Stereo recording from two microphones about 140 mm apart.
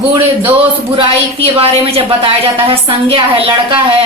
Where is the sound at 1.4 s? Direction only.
45° right (ahead or behind).